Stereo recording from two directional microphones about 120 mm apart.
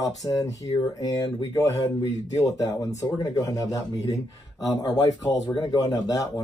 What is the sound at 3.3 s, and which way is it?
Speech, 30° left (ahead or behind).